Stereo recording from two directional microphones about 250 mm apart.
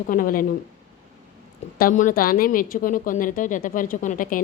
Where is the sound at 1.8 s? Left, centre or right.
Left.